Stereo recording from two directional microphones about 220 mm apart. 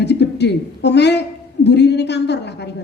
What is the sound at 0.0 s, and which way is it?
A woman's voice, 50° left (ahead or behind).